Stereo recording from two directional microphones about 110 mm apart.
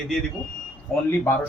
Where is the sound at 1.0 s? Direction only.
20° left (ahead or behind).